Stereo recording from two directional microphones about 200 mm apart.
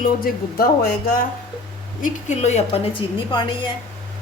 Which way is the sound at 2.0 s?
35° left (ahead or behind).